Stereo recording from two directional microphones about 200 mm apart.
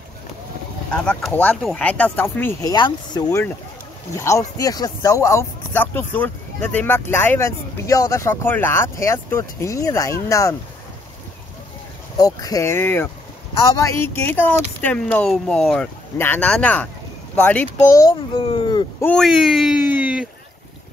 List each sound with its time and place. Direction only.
0.9 s speech: 5° left (ahead or behind)
12.2 s a child's voice: 20° left (ahead or behind)
19.0 s speech: centre (ahead or behind)